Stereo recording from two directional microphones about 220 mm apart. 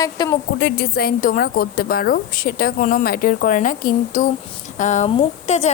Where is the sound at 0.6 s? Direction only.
45° left (ahead or behind).